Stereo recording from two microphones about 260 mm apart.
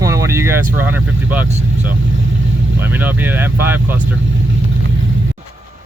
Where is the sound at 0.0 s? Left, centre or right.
Centre.